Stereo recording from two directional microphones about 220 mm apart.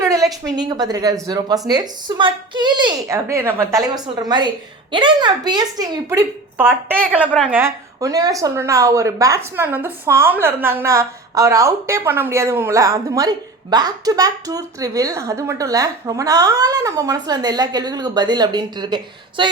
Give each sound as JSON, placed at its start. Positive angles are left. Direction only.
{"t": 0.0, "sound": "a woman's voice", "side_deg": -15}